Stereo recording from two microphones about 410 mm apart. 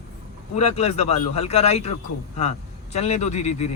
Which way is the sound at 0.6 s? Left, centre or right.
Centre.